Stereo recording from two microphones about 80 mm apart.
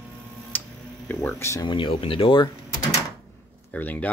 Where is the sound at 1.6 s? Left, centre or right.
Left.